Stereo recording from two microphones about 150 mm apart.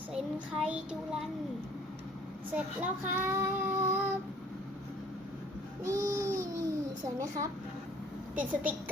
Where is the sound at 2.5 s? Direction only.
10° right (ahead or behind).